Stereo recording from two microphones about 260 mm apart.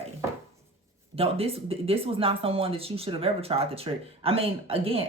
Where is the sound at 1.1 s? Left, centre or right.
Right.